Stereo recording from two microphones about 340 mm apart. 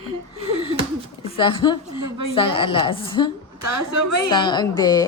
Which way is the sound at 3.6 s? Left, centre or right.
Right.